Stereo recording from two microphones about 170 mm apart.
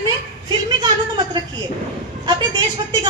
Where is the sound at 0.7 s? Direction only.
25° right (ahead or behind).